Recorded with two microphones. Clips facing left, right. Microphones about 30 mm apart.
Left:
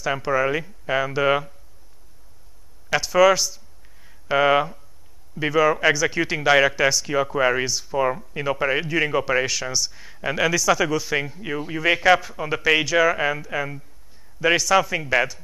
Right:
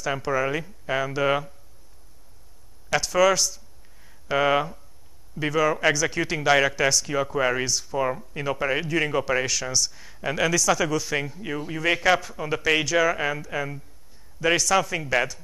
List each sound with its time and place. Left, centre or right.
0.0 s speech: centre
2.9 s a sound: centre
5.3 s speech: centre